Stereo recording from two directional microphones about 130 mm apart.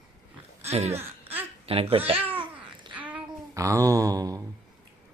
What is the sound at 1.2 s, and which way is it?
Babbling, 15° right (ahead or behind).